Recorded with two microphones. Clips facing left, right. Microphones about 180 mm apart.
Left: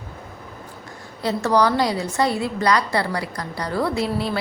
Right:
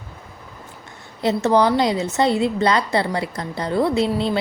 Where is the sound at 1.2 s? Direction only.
25° right (ahead or behind).